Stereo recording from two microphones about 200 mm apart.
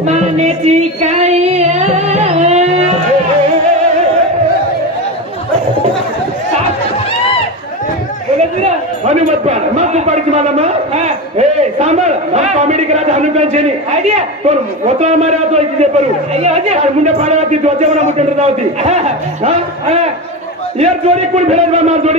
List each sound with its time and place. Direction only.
0.0 s music: 35° right (ahead or behind)
8.4 s a man's voice: 35° right (ahead or behind)
15.0 s a man's voice: 35° right (ahead or behind)